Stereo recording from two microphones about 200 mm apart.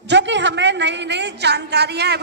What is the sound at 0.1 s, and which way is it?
A woman's voice, 60° right (ahead or behind).